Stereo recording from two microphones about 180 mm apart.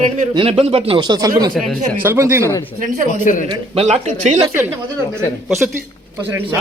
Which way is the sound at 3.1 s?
45° left (ahead or behind).